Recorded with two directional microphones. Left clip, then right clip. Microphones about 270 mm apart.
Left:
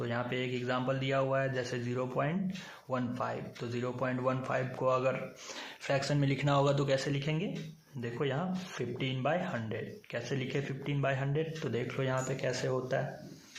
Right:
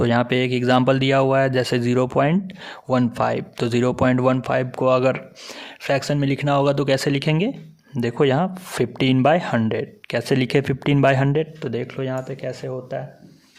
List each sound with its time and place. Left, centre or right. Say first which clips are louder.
0.0 s speech: right 16 dB; right